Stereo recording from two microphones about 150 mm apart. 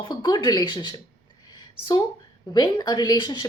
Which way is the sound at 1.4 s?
25° left (ahead or behind).